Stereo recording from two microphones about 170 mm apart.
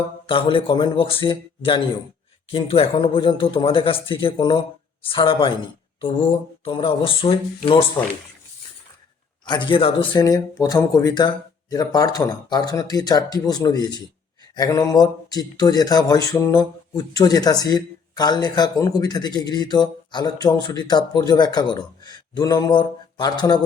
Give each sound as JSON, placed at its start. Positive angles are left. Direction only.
{"t": 0.3, "sound": "speech", "side_deg": 30}
{"t": 6.0, "sound": "a sound", "side_deg": 30}
{"t": 6.7, "sound": "speech", "side_deg": 30}
{"t": 9.5, "sound": "speech", "side_deg": 30}